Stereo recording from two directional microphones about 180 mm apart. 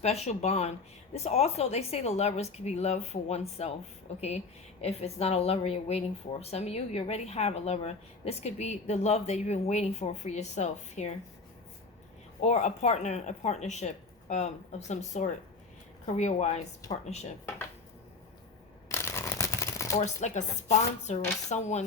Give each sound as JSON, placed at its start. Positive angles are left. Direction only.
{"t": 0.0, "sound": "speech", "side_deg": 35}
{"t": 12.4, "sound": "speech", "side_deg": 40}
{"t": 18.9, "sound": "shuffling cards", "side_deg": 15}
{"t": 20.2, "sound": "speech", "side_deg": 40}